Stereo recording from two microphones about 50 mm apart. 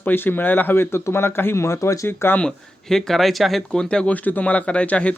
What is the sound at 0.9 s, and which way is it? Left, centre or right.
Speech, left.